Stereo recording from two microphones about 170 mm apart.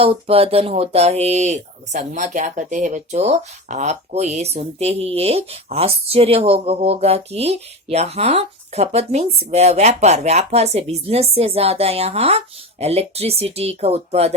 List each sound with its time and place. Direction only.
0.0 s speech: 35° right (ahead or behind)